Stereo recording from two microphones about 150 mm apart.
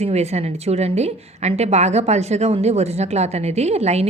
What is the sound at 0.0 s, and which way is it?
A woman's voice, 45° right (ahead or behind).